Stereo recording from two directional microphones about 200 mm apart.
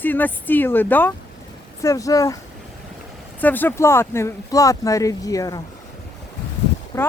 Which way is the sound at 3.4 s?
10° left (ahead or behind).